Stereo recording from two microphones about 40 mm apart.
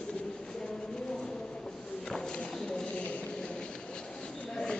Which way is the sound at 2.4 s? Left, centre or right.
Left.